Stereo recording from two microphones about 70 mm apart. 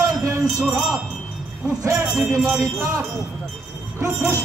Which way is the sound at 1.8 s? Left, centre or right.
Right.